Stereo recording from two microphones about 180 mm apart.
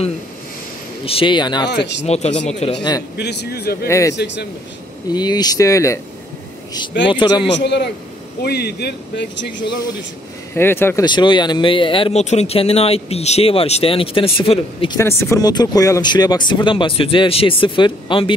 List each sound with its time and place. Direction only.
1.0 s speech: 30° left (ahead or behind)
1.7 s a man's voice: 70° left (ahead or behind)
2.0 s speech: 35° left (ahead or behind)
3.2 s speech: 65° left (ahead or behind)
3.8 s speech: 15° left (ahead or behind)
4.1 s a man's voice: 70° left (ahead or behind)
5.1 s speech: 25° left (ahead or behind)
7.1 s speech: 25° left (ahead or behind)
7.4 s a man's voice: 75° left (ahead or behind)
10.5 s speech: 10° left (ahead or behind)
11.1 s speech: 25° left (ahead or behind)
15.0 s speech: 15° left (ahead or behind)